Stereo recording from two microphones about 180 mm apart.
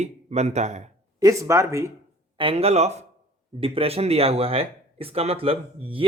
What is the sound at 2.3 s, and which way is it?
Speech, 30° right (ahead or behind).